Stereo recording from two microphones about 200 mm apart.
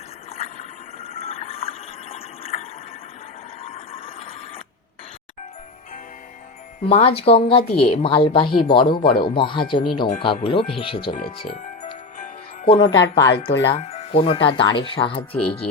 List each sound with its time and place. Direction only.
0.3 s a sound: 30° left (ahead or behind)
1.0 s water: 30° left (ahead or behind)
3.6 s a sound: 30° left (ahead or behind)
6.8 s a woman's voice: 30° left (ahead or behind)
11.4 s music: 35° left (ahead or behind)
13.5 s speech: 60° left (ahead or behind)
13.7 s a woman's voice: 30° left (ahead or behind)